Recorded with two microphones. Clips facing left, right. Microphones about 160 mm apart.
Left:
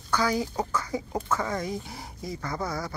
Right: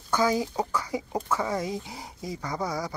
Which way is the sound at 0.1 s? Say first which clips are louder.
Right 2 dB; 20° right (ahead or behind).